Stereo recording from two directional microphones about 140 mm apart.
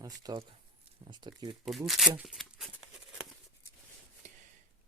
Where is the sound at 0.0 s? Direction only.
25° right (ahead or behind).